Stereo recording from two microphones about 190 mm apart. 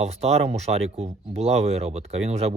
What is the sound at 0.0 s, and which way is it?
Speech, 35° right (ahead or behind).